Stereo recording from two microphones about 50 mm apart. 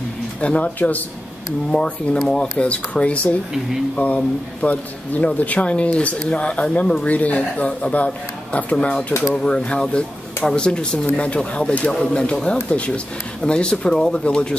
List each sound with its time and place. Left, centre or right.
0.4 s speech: left
1.7 s speech: centre
8.7 s speech: centre